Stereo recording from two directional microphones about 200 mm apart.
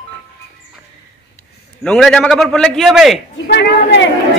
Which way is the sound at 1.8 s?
5° left (ahead or behind).